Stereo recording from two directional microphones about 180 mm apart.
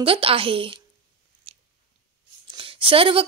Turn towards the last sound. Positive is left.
turn(degrees=-30)  # may be behind; listen again after turning